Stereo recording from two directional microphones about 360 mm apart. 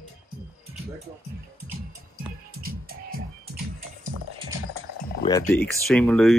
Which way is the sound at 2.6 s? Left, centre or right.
Right.